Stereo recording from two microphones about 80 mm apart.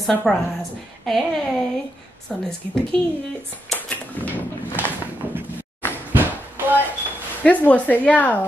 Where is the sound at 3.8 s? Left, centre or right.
Left.